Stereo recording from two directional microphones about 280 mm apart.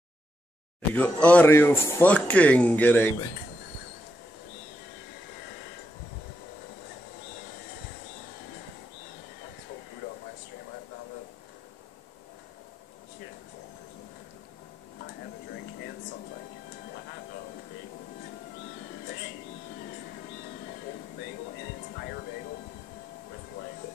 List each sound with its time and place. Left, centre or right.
0.9 s speech: centre